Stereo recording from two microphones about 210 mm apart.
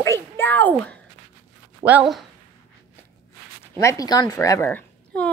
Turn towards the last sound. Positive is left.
turn(degrees=5)  # may be behind; listen again after turning